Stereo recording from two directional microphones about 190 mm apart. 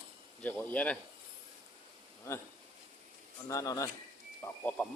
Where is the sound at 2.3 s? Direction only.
15° left (ahead or behind).